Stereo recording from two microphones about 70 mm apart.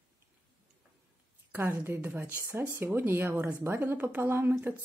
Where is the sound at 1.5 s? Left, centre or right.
Right.